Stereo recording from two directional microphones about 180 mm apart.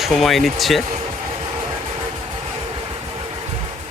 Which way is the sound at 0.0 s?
Centre (ahead or behind).